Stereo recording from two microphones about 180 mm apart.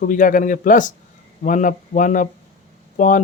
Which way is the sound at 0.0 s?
50° left (ahead or behind).